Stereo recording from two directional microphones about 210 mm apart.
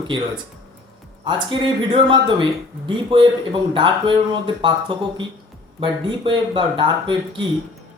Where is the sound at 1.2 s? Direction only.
20° right (ahead or behind).